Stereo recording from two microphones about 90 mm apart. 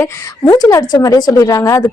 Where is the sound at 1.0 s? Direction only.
40° left (ahead or behind).